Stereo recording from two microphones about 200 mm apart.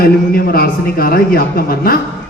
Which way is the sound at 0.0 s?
50° left (ahead or behind).